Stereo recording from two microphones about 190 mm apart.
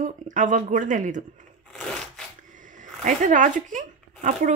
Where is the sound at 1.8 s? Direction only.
5° left (ahead or behind).